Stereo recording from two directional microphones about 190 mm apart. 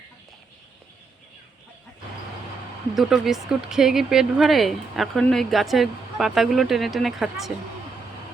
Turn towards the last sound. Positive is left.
turn(degrees=0)  # may be behind; listen again after turning